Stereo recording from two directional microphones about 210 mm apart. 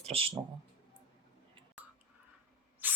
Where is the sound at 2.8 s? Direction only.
10° right (ahead or behind).